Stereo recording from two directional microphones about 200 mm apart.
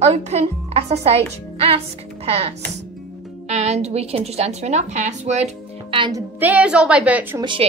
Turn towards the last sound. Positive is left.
turn(degrees=-25)  # may be behind; listen again after turning